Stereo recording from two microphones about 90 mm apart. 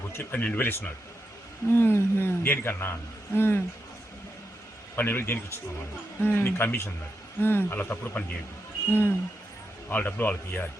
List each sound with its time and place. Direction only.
0.2 s speech: 20° left (ahead or behind)
4.9 s speech: 20° left (ahead or behind)